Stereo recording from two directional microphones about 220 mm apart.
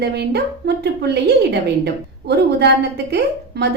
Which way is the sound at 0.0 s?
50° right (ahead or behind).